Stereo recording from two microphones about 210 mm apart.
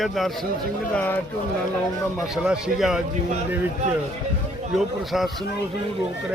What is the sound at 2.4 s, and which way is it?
Speech, 5° right (ahead or behind).